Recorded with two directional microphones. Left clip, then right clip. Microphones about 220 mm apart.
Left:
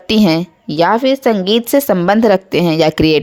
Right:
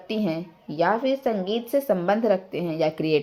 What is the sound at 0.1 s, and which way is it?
A woman's voice, 55° left (ahead or behind).